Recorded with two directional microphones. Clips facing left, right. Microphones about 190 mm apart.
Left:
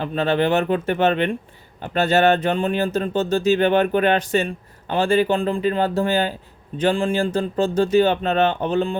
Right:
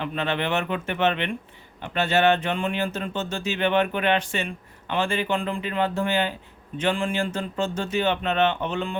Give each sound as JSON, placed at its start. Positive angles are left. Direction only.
{"t": 0.0, "sound": "speech", "side_deg": 35}